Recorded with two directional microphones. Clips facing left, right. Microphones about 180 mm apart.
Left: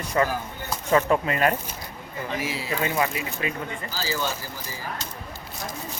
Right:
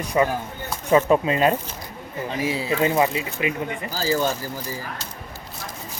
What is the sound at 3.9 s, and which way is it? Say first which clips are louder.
Speech: right 7 dB; 45° right (ahead or behind).